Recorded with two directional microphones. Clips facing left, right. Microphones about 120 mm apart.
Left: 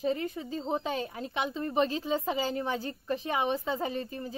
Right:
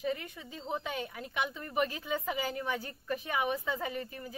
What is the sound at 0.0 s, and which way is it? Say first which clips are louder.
A woman's voice: left 5 dB; 30° left (ahead or behind).